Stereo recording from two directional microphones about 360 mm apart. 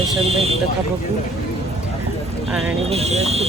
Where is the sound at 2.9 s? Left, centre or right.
Centre.